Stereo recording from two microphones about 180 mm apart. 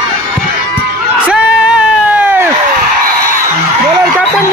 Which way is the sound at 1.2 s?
10° right (ahead or behind).